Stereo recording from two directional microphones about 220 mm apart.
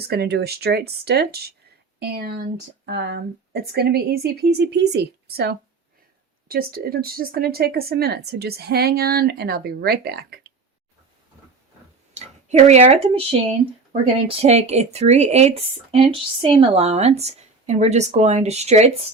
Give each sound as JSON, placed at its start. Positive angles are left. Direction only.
{"t": 0.1, "sound": "speech", "side_deg": -45}
{"t": 12.1, "sound": "speech", "side_deg": -30}